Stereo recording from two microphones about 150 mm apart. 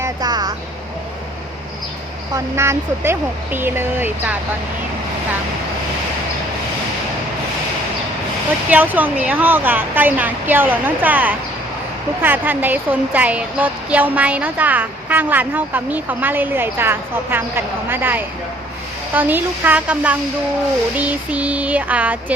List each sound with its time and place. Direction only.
0.0 s vehicle: 25° right (ahead or behind)
2.3 s speech: 15° right (ahead or behind)
8.7 s speech: 10° right (ahead or behind)